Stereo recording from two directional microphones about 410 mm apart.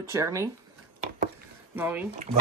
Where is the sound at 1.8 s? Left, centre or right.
Centre.